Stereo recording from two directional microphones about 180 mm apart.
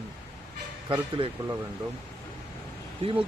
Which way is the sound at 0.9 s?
30° right (ahead or behind).